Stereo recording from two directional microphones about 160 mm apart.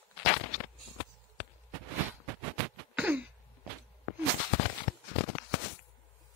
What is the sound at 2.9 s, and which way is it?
Throat clearing, 10° right (ahead or behind).